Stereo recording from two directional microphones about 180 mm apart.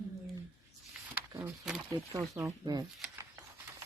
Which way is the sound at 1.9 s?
15° right (ahead or behind).